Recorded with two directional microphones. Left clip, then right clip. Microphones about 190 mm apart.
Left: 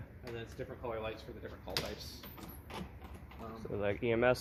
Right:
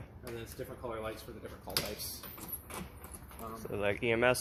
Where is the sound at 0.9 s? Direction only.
25° right (ahead or behind).